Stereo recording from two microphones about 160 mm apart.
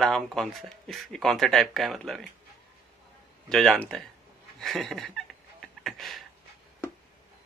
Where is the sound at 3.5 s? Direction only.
5° left (ahead or behind).